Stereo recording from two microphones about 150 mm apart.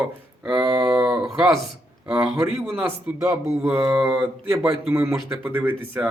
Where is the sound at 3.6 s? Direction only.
10° right (ahead or behind).